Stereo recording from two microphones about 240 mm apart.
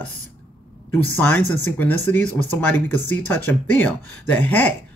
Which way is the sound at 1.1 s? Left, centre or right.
Centre.